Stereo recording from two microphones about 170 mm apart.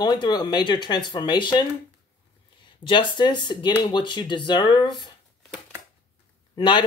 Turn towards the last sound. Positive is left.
turn(degrees=30)  # may be behind; listen again after turning